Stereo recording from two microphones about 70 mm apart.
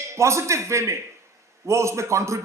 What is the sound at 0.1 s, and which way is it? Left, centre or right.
A man's voice, right.